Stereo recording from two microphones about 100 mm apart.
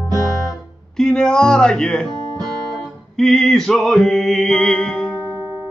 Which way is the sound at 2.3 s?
40° right (ahead or behind).